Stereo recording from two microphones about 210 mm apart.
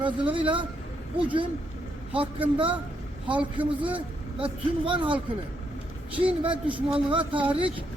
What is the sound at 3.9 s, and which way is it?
Speech, 25° right (ahead or behind).